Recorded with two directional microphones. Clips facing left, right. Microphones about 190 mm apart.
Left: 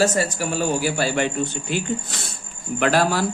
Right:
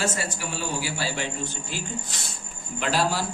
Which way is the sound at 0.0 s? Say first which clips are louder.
Left 8 dB; 40° left (ahead or behind).